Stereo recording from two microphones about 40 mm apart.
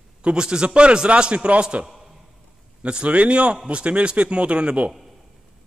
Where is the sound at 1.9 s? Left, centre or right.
Centre.